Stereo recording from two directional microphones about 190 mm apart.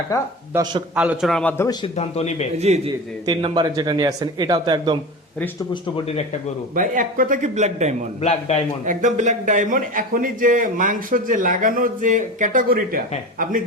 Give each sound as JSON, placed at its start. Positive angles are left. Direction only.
{"t": 0.5, "sound": "speech", "side_deg": -20}
{"t": 0.9, "sound": "a man's voice", "side_deg": -5}
{"t": 2.0, "sound": "a man's voice", "side_deg": 35}
{"t": 2.6, "sound": "a man's voice", "side_deg": -35}
{"t": 3.2, "sound": "speech", "side_deg": -25}
{"t": 6.7, "sound": "a man's voice", "side_deg": -45}
{"t": 8.2, "sound": "a man's voice", "side_deg": 35}
{"t": 8.8, "sound": "a man's voice", "side_deg": -40}